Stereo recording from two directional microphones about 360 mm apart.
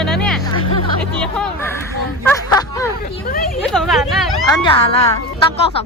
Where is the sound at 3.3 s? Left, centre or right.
Left.